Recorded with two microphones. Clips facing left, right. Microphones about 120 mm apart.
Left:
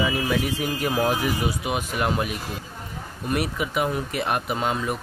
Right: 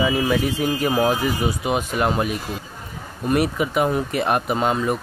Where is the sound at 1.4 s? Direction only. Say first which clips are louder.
Right 4 dB; 40° right (ahead or behind).